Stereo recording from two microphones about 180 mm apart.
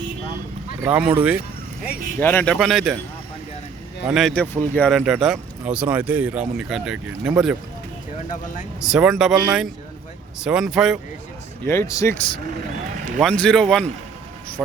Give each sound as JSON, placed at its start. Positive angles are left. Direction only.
{"t": 0.8, "sound": "speech", "side_deg": -10}
{"t": 2.1, "sound": "speech", "side_deg": 10}
{"t": 4.0, "sound": "speech", "side_deg": 0}
{"t": 8.8, "sound": "speech", "side_deg": -5}
{"t": 11.7, "sound": "speech", "side_deg": 15}
{"t": 13.1, "sound": "speech", "side_deg": 5}